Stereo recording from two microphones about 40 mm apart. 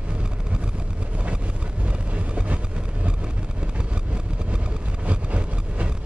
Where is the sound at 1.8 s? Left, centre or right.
Right.